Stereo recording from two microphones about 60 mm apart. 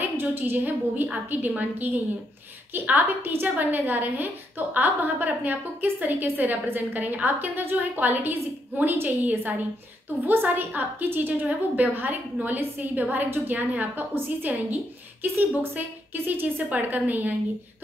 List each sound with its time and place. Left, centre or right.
0.0 s a woman's voice: right
2.9 s a woman's voice: right